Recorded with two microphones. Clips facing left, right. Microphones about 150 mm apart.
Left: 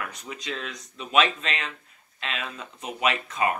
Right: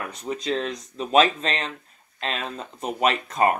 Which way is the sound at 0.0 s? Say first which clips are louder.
Right 6 dB; 30° right (ahead or behind).